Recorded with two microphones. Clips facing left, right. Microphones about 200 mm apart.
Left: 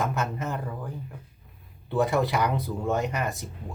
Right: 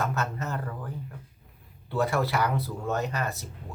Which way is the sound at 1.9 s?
20° left (ahead or behind).